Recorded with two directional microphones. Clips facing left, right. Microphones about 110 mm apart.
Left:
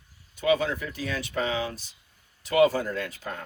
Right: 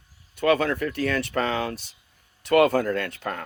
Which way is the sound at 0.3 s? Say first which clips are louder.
Right 3 dB; 65° right (ahead or behind).